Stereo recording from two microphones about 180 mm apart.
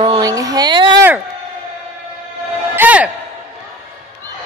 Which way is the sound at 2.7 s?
10° right (ahead or behind).